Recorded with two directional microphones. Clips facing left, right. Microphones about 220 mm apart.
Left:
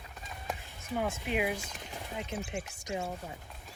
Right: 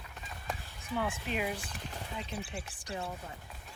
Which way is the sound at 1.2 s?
15° left (ahead or behind).